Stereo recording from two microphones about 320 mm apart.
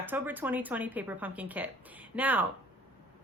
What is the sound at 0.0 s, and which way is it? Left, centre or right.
A woman's voice, centre.